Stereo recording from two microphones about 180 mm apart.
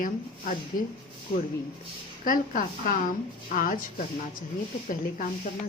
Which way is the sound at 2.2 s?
50° left (ahead or behind).